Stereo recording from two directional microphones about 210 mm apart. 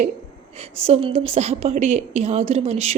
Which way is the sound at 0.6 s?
30° right (ahead or behind).